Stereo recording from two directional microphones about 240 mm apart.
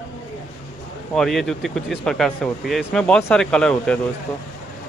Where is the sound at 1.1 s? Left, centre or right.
Centre.